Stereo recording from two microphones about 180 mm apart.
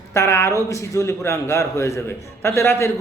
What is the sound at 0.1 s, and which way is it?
A woman's voice, 15° left (ahead or behind).